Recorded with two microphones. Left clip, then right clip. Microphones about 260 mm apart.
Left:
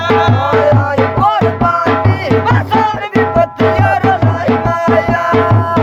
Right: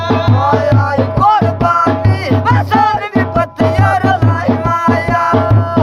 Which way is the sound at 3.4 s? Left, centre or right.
Right.